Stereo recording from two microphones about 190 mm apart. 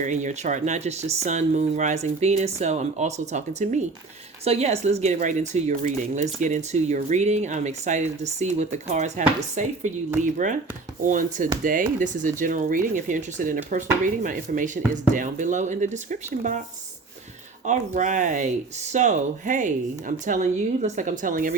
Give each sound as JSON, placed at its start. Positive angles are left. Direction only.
{"t": 0.0, "sound": "speech", "side_deg": -40}
{"t": 17.7, "sound": "speech", "side_deg": -40}